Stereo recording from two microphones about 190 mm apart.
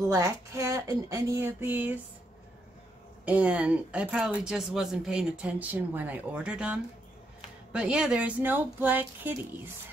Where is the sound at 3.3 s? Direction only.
5° right (ahead or behind).